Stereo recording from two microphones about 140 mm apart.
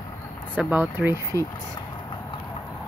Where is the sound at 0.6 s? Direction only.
10° right (ahead or behind).